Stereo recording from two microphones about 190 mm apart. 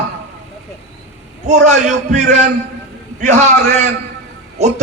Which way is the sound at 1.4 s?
40° right (ahead or behind).